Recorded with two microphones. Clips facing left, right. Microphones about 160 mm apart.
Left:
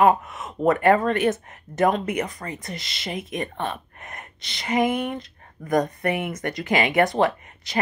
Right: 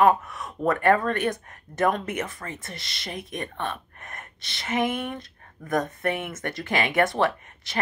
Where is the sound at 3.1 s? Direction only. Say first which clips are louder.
Left 4 dB; centre (ahead or behind).